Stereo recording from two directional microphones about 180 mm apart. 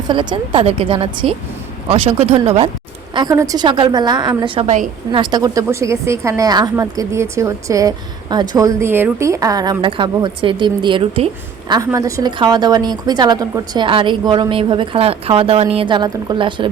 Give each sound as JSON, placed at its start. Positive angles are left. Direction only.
{"t": 0.1, "sound": "a woman's voice", "side_deg": -25}
{"t": 3.2, "sound": "a woman's voice", "side_deg": -20}
{"t": 11.7, "sound": "a woman's voice", "side_deg": -20}